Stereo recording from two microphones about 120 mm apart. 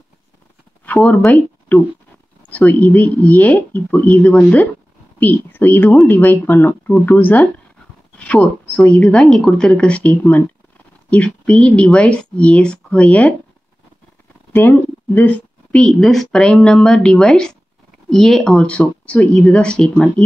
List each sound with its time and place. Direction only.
0.8 s speech: 10° left (ahead or behind)
14.5 s a woman's voice: 15° left (ahead or behind)